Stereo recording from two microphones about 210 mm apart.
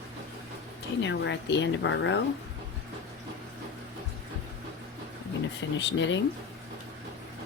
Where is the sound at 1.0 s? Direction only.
55° left (ahead or behind).